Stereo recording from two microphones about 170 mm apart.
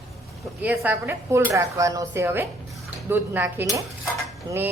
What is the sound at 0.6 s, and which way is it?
A woman's voice, 10° right (ahead or behind).